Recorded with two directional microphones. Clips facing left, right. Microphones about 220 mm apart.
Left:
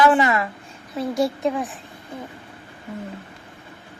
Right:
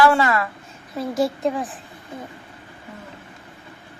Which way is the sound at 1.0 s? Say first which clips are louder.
Even; centre (ahead or behind).